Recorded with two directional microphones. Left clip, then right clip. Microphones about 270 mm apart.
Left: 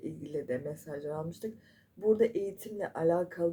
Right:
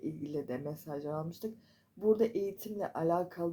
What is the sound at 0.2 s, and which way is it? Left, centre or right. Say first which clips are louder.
Speech: left 3 dB; right.